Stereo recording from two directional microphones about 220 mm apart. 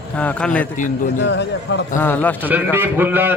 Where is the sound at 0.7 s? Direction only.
35° left (ahead or behind).